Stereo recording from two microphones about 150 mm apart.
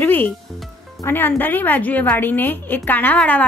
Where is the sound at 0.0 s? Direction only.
15° left (ahead or behind).